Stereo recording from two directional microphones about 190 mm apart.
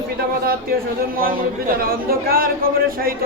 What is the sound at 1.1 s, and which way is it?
A man's voice, 50° right (ahead or behind).